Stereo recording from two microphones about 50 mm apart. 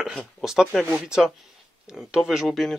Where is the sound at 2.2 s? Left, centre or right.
Centre.